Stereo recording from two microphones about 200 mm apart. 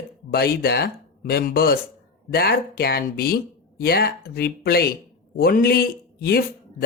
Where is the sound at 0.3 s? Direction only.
50° left (ahead or behind).